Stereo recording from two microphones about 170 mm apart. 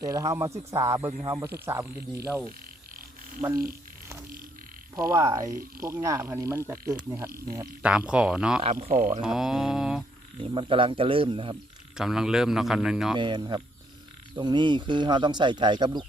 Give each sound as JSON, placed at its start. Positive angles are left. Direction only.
{"t": 0.0, "sound": "speech", "side_deg": -20}
{"t": 3.5, "sound": "speech", "side_deg": -60}
{"t": 4.9, "sound": "speech", "side_deg": -20}
{"t": 7.8, "sound": "speech", "side_deg": -5}
{"t": 8.9, "sound": "speech", "side_deg": -50}
{"t": 9.2, "sound": "speech", "side_deg": 0}
{"t": 10.4, "sound": "speech", "side_deg": -30}
{"t": 11.9, "sound": "speech", "side_deg": -5}
{"t": 13.1, "sound": "speech", "side_deg": -25}